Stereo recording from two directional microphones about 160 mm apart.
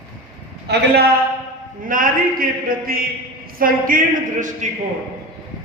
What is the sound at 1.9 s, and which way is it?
A man's voice, 60° right (ahead or behind).